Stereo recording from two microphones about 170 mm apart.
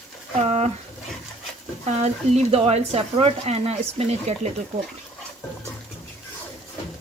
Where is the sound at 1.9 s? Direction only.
40° right (ahead or behind).